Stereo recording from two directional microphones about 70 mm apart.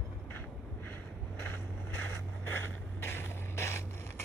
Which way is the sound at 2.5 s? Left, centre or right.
Left.